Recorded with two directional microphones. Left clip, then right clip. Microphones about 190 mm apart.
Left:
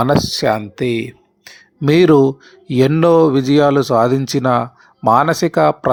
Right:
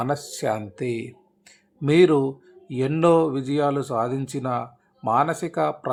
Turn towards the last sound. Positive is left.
turn(degrees=35)  # may be behind; listen again after turning